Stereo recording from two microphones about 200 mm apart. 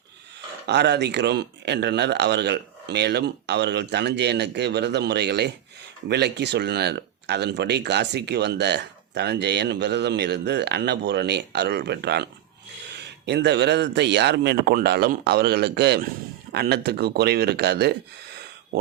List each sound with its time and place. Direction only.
0.7 s speech: 60° right (ahead or behind)